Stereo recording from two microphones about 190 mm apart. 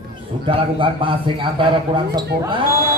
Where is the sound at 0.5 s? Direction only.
25° right (ahead or behind).